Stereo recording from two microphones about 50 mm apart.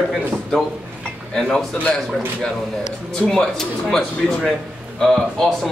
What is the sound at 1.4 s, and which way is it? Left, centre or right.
Speech, centre.